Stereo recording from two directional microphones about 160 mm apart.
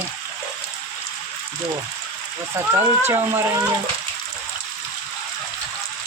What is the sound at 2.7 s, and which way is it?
Speech, 15° right (ahead or behind).